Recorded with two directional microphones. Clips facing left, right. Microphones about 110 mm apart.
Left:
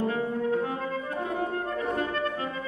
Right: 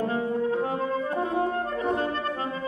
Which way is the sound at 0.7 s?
30° right (ahead or behind).